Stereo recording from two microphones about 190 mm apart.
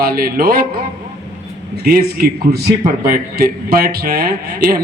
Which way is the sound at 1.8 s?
55° right (ahead or behind).